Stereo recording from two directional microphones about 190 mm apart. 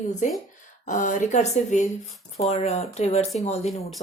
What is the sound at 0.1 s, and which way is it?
A woman's voice, 40° left (ahead or behind).